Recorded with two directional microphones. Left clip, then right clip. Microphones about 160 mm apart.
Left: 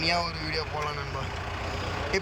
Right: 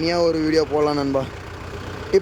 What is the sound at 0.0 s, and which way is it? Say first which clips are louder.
Speech: right 9 dB; 35° right (ahead or behind).